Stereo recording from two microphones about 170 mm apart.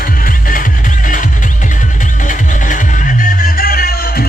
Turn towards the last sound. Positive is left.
turn(degrees=60)  # may be behind; listen again after turning